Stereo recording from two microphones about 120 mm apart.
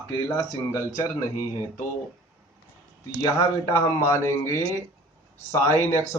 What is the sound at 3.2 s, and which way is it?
Speech, 30° left (ahead or behind).